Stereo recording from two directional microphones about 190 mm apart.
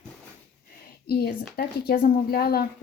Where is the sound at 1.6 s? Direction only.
50° left (ahead or behind).